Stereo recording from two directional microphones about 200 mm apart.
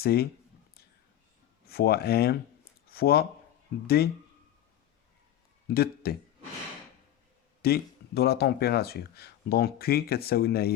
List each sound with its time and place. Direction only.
0.0 s speech: 50° left (ahead or behind)
1.6 s speech: 50° left (ahead or behind)
5.7 s speech: 50° left (ahead or behind)
7.6 s speech: 55° left (ahead or behind)